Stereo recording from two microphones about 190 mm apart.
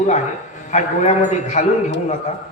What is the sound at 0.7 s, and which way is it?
Speech, 40° left (ahead or behind).